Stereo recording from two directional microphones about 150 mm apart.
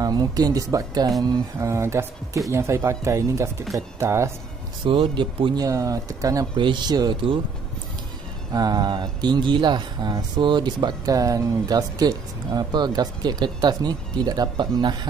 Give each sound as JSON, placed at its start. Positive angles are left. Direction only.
{"t": 0.0, "sound": "speech", "side_deg": -25}
{"t": 4.8, "sound": "speech", "side_deg": -35}
{"t": 5.7, "sound": "speech", "side_deg": -20}
{"t": 8.5, "sound": "speech", "side_deg": -25}